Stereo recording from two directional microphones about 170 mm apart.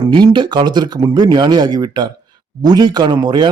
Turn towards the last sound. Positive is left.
turn(degrees=-25)  # may be behind; listen again after turning